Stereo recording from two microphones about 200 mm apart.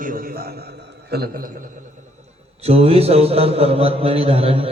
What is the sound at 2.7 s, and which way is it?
A man's voice, 30° right (ahead or behind).